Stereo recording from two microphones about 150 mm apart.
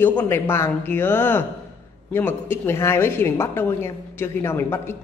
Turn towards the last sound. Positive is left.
turn(degrees=15)  # may be behind; listen again after turning